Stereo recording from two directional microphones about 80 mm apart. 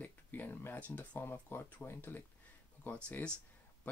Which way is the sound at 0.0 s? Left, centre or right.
Left.